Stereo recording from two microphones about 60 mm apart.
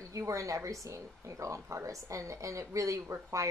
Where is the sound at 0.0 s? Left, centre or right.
Right.